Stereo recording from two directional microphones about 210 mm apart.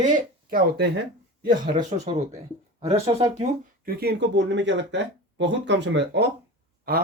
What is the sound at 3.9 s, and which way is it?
Speech, 50° right (ahead or behind).